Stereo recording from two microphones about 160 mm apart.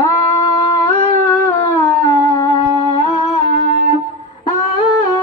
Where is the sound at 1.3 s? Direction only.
20° left (ahead or behind).